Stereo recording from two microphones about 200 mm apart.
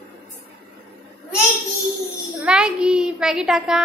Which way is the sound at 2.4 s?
5° right (ahead or behind).